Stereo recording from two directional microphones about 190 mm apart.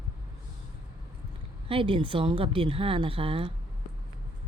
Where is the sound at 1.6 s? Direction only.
30° right (ahead or behind).